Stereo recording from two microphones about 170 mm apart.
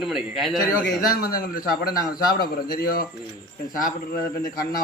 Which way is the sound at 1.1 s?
55° left (ahead or behind).